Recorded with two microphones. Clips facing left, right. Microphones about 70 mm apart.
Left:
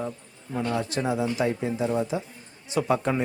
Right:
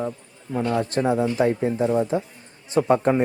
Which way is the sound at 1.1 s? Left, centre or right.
Right.